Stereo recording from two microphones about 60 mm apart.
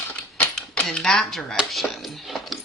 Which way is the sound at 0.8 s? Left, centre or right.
Centre.